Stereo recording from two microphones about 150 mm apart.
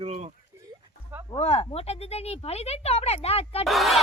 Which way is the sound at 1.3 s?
40° left (ahead or behind).